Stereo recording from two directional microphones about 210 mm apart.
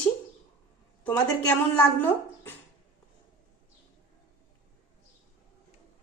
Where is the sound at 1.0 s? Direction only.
5° left (ahead or behind).